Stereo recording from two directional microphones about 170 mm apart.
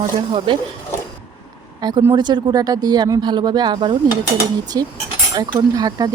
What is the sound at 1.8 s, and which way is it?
Speech, 25° right (ahead or behind).